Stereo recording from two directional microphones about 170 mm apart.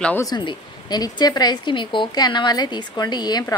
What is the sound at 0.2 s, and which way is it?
Speech, 25° left (ahead or behind).